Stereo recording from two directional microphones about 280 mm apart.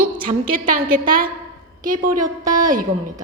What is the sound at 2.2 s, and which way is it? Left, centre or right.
Speech, centre.